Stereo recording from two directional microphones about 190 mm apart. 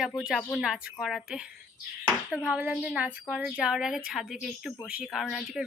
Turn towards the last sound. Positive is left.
turn(degrees=0)  # may be behind; listen again after turning